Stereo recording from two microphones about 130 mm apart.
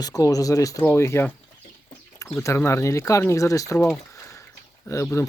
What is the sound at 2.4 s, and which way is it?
Speech, 20° left (ahead or behind).